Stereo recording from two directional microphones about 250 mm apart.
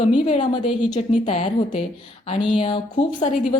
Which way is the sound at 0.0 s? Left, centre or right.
Left.